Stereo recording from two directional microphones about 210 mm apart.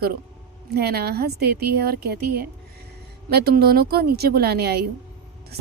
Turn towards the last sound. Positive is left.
turn(degrees=-50)  # may be behind; listen again after turning